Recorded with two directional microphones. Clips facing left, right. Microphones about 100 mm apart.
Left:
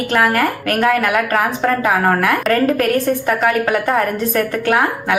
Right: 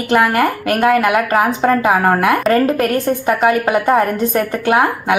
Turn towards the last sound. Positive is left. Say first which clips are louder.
# right 2 dB
turn(degrees=-15)  # may be behind; listen again after turning